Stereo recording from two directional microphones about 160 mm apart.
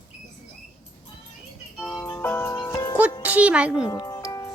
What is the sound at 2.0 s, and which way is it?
Music, 15° left (ahead or behind).